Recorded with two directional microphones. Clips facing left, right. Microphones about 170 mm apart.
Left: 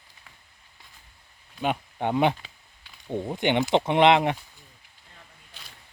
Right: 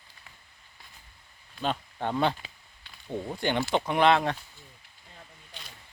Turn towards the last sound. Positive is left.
turn(degrees=20)  # may be behind; listen again after turning